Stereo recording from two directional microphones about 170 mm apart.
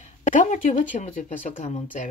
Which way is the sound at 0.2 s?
50° left (ahead or behind).